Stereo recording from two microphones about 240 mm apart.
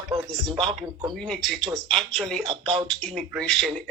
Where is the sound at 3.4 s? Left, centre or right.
Centre.